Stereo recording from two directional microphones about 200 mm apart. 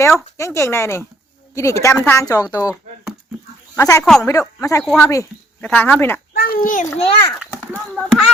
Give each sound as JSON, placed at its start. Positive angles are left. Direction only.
{"t": 0.0, "sound": "speech", "side_deg": 15}
{"t": 3.8, "sound": "speech", "side_deg": 15}
{"t": 4.0, "sound": "speech", "side_deg": 0}
{"t": 4.3, "sound": "speech", "side_deg": 15}
{"t": 4.8, "sound": "speech", "side_deg": 0}
{"t": 6.3, "sound": "a child's voice", "side_deg": 50}
{"t": 7.3, "sound": "a child's voice", "side_deg": -5}
{"t": 7.9, "sound": "speech", "side_deg": 5}